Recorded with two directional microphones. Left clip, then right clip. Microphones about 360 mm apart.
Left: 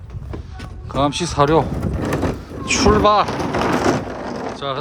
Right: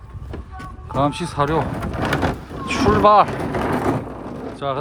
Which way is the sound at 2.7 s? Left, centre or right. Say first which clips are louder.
Even; centre.